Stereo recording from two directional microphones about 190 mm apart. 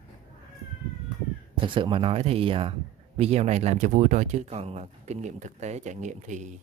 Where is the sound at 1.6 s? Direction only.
25° right (ahead or behind).